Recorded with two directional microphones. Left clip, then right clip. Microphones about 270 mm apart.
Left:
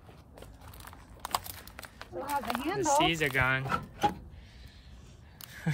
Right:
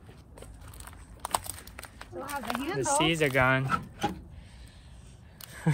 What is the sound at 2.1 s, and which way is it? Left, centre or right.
Speech, left.